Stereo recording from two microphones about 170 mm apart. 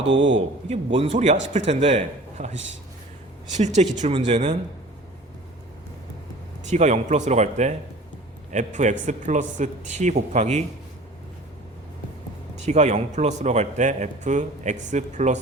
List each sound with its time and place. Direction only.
0.0 s a man's voice: 90° right
0.7 s speech: 35° right (ahead or behind)
3.6 s a man's voice: 40° right (ahead or behind)
6.7 s a man's voice: 40° right (ahead or behind)
12.5 s a man's voice: 40° right (ahead or behind)